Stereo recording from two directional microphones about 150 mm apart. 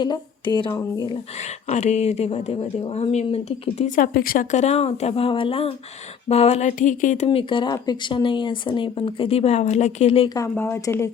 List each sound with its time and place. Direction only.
0.0 s a woman's voice: 30° left (ahead or behind)
1.1 s speech: 45° left (ahead or behind); by 4.4 s 75° left (ahead or behind)
4.5 s speech: 45° left (ahead or behind)
7.3 s speech: 30° left (ahead or behind)
10.2 s a woman's voice: 25° left (ahead or behind)